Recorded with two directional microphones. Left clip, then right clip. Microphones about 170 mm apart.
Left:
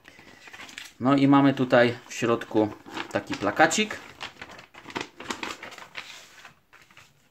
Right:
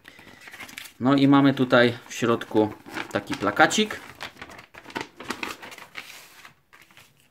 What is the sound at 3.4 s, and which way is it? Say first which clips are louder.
Speech: right 2 dB; 15° right (ahead or behind).